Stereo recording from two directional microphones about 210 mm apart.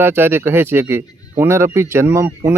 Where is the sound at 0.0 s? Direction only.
10° right (ahead or behind).